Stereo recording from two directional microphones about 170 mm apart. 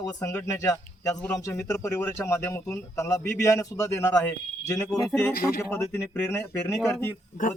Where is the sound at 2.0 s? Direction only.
15° left (ahead or behind).